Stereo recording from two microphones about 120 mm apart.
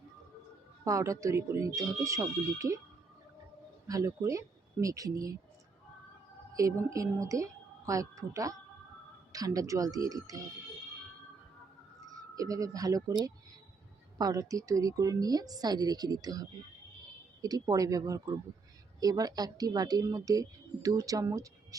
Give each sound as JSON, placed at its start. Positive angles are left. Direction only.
{"t": 0.9, "sound": "speech", "side_deg": -25}
{"t": 3.8, "sound": "speech", "side_deg": -25}
{"t": 6.6, "sound": "speech", "side_deg": -25}
{"t": 12.0, "sound": "a woman's voice", "side_deg": -30}